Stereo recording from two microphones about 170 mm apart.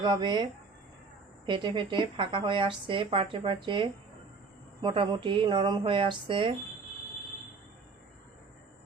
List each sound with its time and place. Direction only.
0.0 s speech: 25° right (ahead or behind)
1.5 s speech: 30° right (ahead or behind)